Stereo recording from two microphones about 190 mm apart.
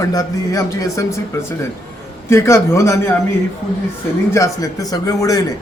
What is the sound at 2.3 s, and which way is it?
Speech, 15° left (ahead or behind).